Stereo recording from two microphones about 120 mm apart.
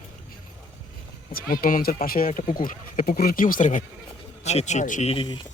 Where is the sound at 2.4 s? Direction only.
75° left (ahead or behind).